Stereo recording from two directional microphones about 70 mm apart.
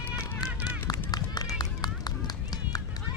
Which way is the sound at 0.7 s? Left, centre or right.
Left.